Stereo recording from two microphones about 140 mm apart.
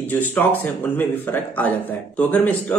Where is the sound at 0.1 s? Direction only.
10° left (ahead or behind).